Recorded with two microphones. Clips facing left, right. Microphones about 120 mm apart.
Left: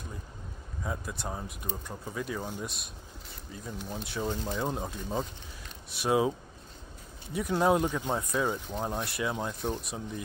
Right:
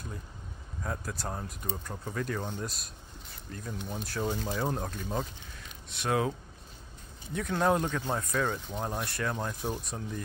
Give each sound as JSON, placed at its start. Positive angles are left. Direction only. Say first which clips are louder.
{"t": 0.8, "sound": "speech", "louder": "even", "side_deg": 0}
{"t": 6.0, "sound": "speech", "louder": "left 3 dB", "side_deg": 15}
{"t": 7.3, "sound": "speech", "louder": "left 2 dB", "side_deg": 10}